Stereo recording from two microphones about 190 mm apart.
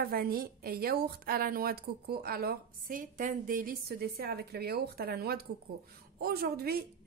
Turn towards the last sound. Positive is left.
turn(degrees=-55)  # may be behind; listen again after turning